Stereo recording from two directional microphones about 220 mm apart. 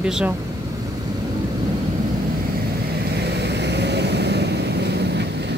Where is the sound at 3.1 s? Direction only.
50° right (ahead or behind).